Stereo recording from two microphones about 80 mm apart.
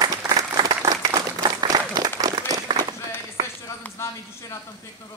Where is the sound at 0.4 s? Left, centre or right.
Right.